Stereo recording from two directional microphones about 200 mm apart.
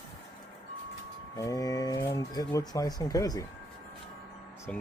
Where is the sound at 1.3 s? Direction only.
15° left (ahead or behind).